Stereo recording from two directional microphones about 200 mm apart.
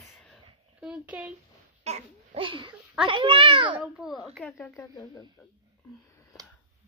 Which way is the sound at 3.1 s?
25° right (ahead or behind).